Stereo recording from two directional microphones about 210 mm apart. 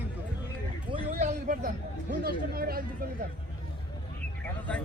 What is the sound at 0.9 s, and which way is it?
Speech, 25° right (ahead or behind).